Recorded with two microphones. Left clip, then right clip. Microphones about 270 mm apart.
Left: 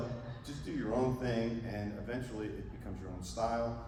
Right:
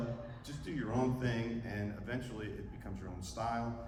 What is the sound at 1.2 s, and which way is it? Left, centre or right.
A man's voice, centre.